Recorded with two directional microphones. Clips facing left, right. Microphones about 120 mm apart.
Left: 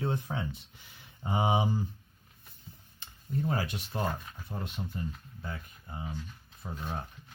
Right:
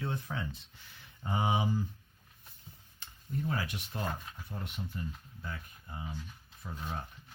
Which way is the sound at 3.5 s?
35° left (ahead or behind).